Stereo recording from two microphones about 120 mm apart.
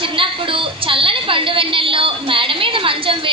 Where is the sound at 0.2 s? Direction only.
45° right (ahead or behind).